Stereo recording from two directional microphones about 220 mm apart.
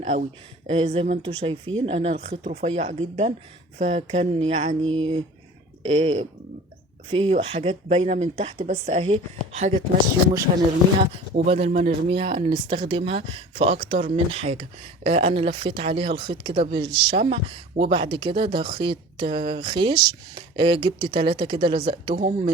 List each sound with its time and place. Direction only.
0.0 s speech: 30° right (ahead or behind)
11.1 s speech: 25° right (ahead or behind)
22.1 s speech: 35° right (ahead or behind)